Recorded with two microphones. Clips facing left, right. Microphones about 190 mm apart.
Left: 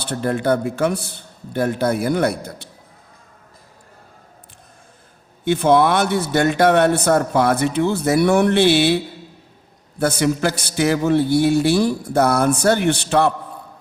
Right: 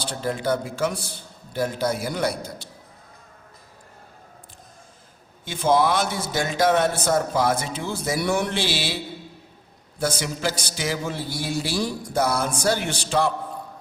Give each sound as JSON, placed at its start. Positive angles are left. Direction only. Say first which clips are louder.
{"t": 0.0, "sound": "a man's voice", "louder": "left 6 dB", "side_deg": 60}
{"t": 5.5, "sound": "a man's voice", "louder": "left 5 dB", "side_deg": 60}
{"t": 10.0, "sound": "a man's voice", "louder": "left 7 dB", "side_deg": 60}